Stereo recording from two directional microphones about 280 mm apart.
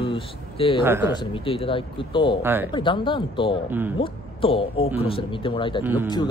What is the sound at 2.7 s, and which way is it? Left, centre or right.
Speech, centre.